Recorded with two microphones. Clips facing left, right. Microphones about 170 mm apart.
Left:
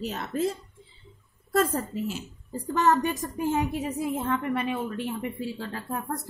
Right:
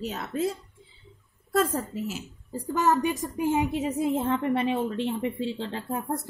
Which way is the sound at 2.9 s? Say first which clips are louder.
Even; 20° right (ahead or behind).